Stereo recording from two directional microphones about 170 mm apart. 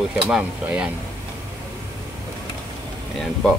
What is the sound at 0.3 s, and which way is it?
Speech, 5° right (ahead or behind).